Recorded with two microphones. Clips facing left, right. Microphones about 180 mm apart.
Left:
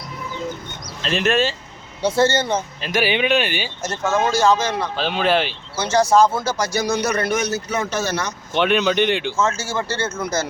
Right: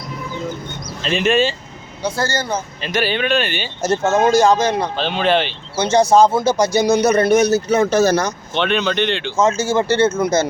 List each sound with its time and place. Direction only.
1.0 s speech: centre (ahead or behind)
2.0 s speech: 25° left (ahead or behind)
2.8 s speech: 10° left (ahead or behind)
3.8 s speech: 30° right (ahead or behind)
4.9 s speech: 5° left (ahead or behind)
5.7 s speech: 20° right (ahead or behind); by 8.3 s 40° right (ahead or behind)
8.5 s speech: 10° left (ahead or behind)
9.3 s speech: 15° right (ahead or behind)